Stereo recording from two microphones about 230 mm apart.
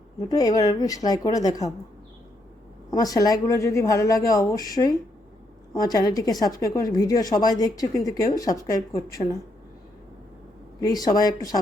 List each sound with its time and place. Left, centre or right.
0.2 s speech: centre
2.9 s speech: centre
10.8 s speech: centre